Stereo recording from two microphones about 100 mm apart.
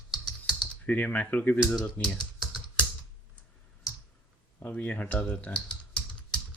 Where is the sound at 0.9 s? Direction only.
15° left (ahead or behind).